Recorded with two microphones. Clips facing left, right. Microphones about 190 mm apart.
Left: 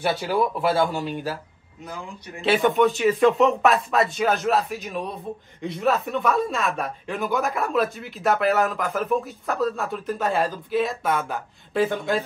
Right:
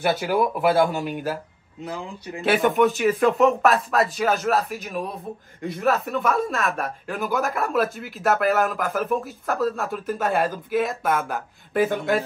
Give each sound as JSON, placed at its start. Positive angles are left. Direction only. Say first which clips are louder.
{"t": 0.0, "sound": "speech", "louder": "right 1 dB", "side_deg": -5}
{"t": 1.9, "sound": "speech", "louder": "right 4 dB", "side_deg": -30}
{"t": 2.4, "sound": "speech", "louder": "even", "side_deg": 0}